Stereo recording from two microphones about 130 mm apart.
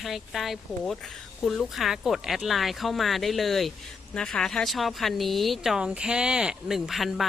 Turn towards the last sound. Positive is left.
turn(degrees=0)  # may be behind; listen again after turning